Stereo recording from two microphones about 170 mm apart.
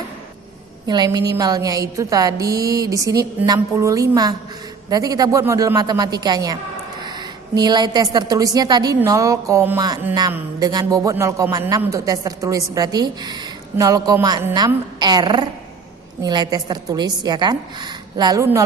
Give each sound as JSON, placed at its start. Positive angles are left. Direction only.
{"t": 0.8, "sound": "a woman's voice", "side_deg": -25}